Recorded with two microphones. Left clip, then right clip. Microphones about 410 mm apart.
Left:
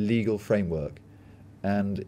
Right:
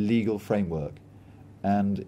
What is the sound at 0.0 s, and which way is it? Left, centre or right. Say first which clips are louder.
Speech: even; centre.